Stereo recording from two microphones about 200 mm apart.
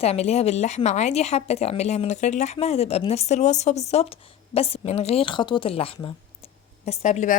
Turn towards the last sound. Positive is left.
turn(degrees=35)  # may be behind; listen again after turning